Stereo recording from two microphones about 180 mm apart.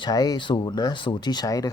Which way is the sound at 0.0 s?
20° left (ahead or behind).